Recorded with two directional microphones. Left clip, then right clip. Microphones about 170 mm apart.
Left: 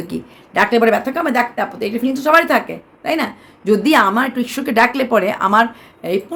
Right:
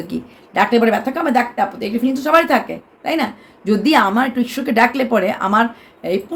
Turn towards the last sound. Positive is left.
turn(degrees=15)  # may be behind; listen again after turning